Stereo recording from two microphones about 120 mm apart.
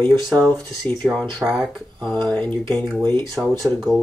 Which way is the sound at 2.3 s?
15° left (ahead or behind).